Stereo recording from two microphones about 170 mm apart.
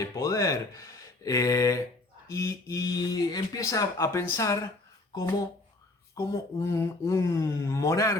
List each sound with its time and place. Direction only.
0.2 s speech: 20° left (ahead or behind)
6.1 s speech: 20° left (ahead or behind)